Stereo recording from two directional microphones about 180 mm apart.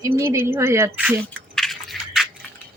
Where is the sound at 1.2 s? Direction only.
Centre (ahead or behind).